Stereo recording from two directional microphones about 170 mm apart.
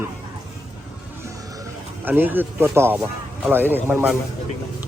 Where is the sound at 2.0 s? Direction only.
10° right (ahead or behind).